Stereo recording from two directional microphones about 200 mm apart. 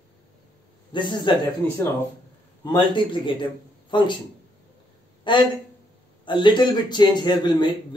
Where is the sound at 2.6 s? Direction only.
25° left (ahead or behind).